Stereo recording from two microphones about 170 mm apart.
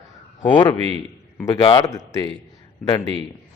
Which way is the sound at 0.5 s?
25° left (ahead or behind).